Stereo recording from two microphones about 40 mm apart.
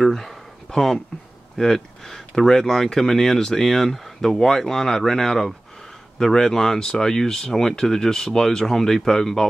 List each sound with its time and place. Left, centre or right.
0.0 s speech: centre